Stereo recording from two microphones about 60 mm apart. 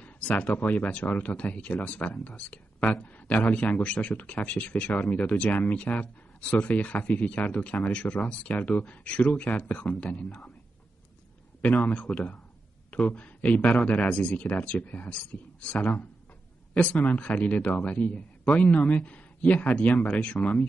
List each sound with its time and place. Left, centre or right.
0.0 s speech: left
11.6 s speech: left
19.9 s speech: centre